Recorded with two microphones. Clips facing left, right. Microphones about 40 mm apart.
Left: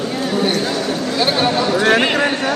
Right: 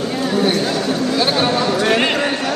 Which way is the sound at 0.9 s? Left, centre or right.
Centre.